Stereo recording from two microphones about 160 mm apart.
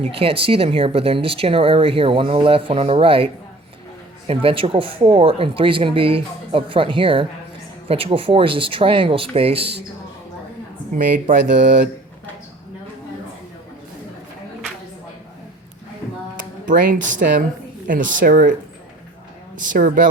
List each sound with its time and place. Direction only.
0.4 s speech: 35° right (ahead or behind)
4.3 s speech: 35° right (ahead or behind)
10.9 s speech: 55° right (ahead or behind)
16.6 s speech: 55° right (ahead or behind)